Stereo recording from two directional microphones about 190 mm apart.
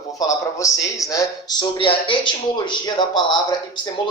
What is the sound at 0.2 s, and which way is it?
A man's voice, 15° left (ahead or behind).